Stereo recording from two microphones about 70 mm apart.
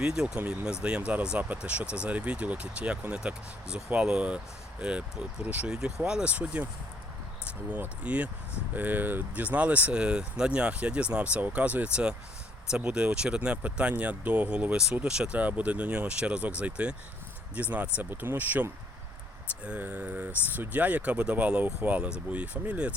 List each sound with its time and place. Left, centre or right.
0.0 s speech: centre
7.7 s speech: right